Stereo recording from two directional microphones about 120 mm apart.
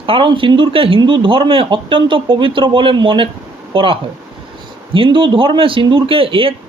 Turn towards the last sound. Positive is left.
turn(degrees=-50)  # may be behind; listen again after turning